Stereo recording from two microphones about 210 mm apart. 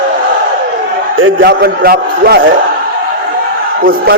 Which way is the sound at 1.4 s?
45° right (ahead or behind).